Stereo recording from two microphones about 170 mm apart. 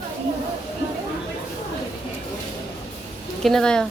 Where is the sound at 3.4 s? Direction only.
5° left (ahead or behind).